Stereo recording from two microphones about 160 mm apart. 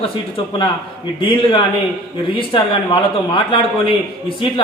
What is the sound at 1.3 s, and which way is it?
A man's voice, 30° left (ahead or behind).